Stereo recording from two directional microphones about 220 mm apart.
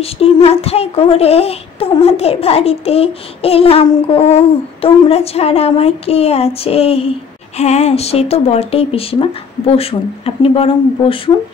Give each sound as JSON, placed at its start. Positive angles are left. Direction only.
{"t": 0.0, "sound": "speech", "side_deg": 25}